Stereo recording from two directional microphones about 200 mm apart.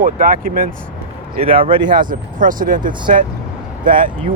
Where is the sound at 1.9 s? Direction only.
45° right (ahead or behind).